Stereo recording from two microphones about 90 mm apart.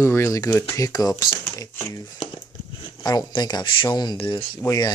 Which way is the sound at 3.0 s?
50° left (ahead or behind).